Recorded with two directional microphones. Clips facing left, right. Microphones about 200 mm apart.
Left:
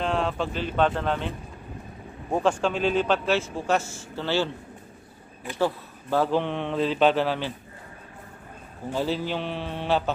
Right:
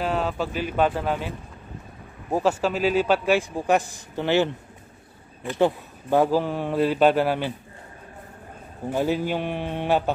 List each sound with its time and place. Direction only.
0.0 s a man's voice: 5° right (ahead or behind)
2.3 s a man's voice: 5° right (ahead or behind)
5.6 s speech: 15° right (ahead or behind)
6.3 s a man's voice: 5° right (ahead or behind)
8.9 s a man's voice: 15° right (ahead or behind)